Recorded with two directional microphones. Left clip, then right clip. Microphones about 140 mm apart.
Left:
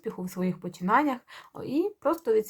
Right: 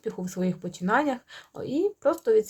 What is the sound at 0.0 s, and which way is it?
Speech, 40° right (ahead or behind).